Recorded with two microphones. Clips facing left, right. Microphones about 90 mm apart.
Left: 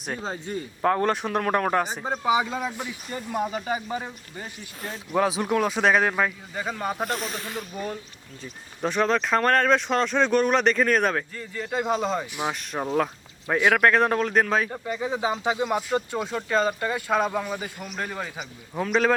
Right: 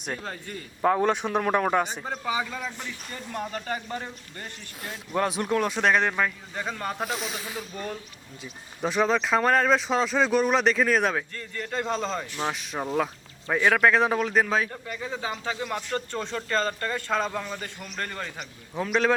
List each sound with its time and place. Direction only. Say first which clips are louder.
0.2 s speech: left 5 dB; 20° left (ahead or behind)
0.8 s speech: even; centre (ahead or behind)
2.0 s speech: left 6 dB; 15° left (ahead or behind); by 7.6 s 5° right (ahead or behind)
7.7 s speech: left 2 dB; 10° left (ahead or behind)
14.7 s speech: left 6 dB; 20° left (ahead or behind); by 19.1 s centre (ahead or behind)